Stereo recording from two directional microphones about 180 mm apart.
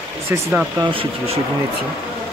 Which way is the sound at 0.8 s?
30° right (ahead or behind).